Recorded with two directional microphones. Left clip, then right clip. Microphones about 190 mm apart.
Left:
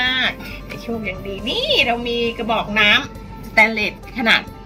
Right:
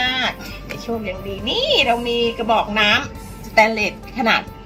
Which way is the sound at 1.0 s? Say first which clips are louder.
Even; 15° left (ahead or behind).